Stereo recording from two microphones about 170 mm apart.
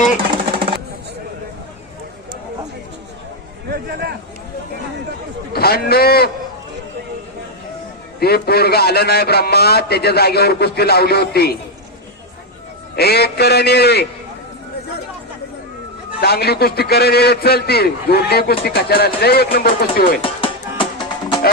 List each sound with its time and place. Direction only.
3.7 s a sound: 65° right (ahead or behind)
5.5 s a man's voice: 65° left (ahead or behind)
8.2 s a man's voice: 65° left (ahead or behind)
13.0 s a man's voice: 70° left (ahead or behind)
16.2 s a man's voice: 65° left (ahead or behind)
20.2 s music: 30° left (ahead or behind)